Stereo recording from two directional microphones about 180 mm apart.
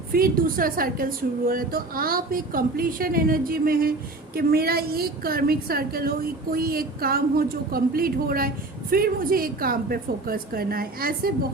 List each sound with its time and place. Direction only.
0.1 s a woman's voice: 55° right (ahead or behind)